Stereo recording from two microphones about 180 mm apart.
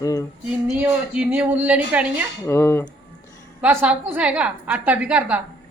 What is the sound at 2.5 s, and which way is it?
Speech, 15° left (ahead or behind).